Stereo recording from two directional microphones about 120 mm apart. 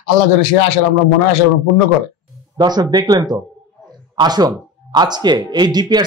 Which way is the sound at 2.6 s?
35° right (ahead or behind).